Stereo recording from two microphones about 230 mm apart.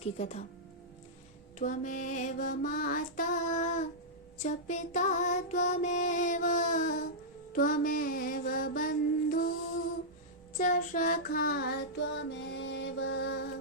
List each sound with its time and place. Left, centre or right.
0.2 s speech: left
1.5 s music: left
7.5 s mantra: left
10.6 s child singing: left